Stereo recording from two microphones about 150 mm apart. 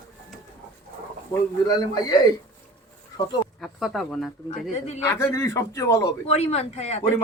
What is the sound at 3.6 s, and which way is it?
Speech, centre (ahead or behind).